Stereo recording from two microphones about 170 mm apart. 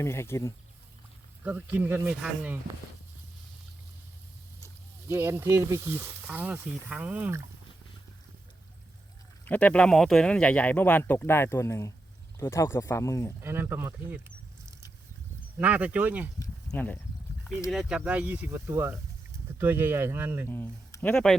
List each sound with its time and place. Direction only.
0.0 s speech: 15° left (ahead or behind)
1.5 s speech: 10° right (ahead or behind)
5.0 s speech: 15° right (ahead or behind)
9.4 s speech: 10° left (ahead or behind)
13.4 s speech: 15° right (ahead or behind)
15.5 s speech: 10° right (ahead or behind)
16.4 s a sound: 10° left (ahead or behind)
17.7 s speech: centre (ahead or behind)
20.5 s speech: 10° left (ahead or behind)